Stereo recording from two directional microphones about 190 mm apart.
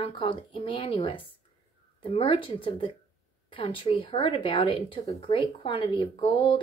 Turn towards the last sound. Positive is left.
turn(degrees=25)  # may be behind; listen again after turning